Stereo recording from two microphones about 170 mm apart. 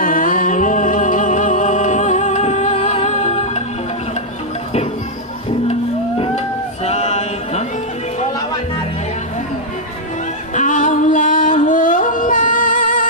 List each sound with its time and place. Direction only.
0.0 s music: 55° left (ahead or behind)
5.7 s music: 35° left (ahead or behind)
10.5 s music: 50° left (ahead or behind)